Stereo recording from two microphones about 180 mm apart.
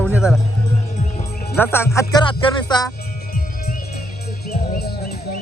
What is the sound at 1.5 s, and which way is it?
Speech, 10° left (ahead or behind).